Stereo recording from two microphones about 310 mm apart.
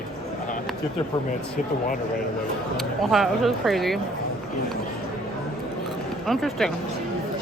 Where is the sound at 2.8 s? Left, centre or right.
Centre.